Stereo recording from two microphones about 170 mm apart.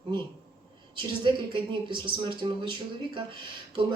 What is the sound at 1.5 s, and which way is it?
Speech, 30° right (ahead or behind).